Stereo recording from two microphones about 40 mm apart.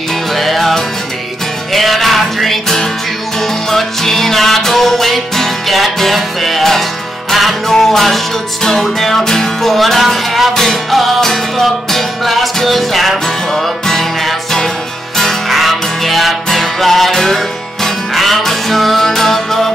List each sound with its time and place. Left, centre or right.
0.3 s music: centre
7.7 s music: centre
10.5 s music: centre